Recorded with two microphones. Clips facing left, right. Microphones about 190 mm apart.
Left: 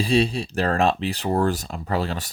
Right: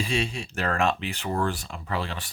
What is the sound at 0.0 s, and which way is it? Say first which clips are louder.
Speech: left 8 dB; 35° left (ahead or behind).